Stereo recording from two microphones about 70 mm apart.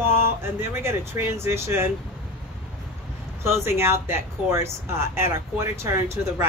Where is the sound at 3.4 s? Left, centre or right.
Right.